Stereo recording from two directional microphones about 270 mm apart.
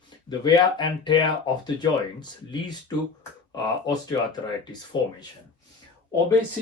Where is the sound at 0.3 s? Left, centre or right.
Centre.